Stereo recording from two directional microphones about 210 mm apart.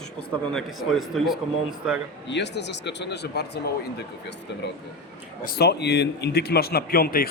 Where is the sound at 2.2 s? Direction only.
55° left (ahead or behind).